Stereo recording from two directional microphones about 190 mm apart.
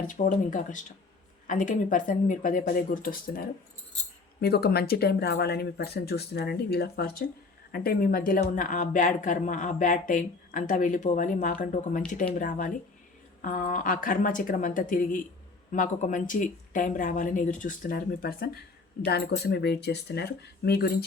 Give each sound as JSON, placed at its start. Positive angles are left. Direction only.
{"t": 0.1, "sound": "speech", "side_deg": 40}